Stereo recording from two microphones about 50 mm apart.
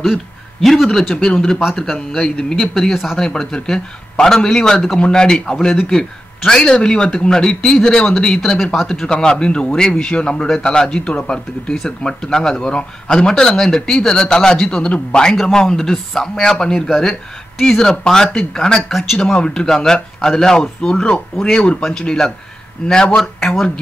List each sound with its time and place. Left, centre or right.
0.0 s a man's voice: centre
1.1 s speech: centre
2.5 s speech: centre
3.2 s speech: centre
18.8 s speech: centre
19.3 s a man's voice: centre